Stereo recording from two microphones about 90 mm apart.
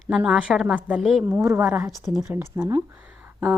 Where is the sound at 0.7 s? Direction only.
15° right (ahead or behind).